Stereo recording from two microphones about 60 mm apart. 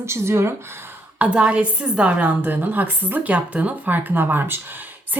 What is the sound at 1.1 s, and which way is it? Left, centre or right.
A woman's voice, right.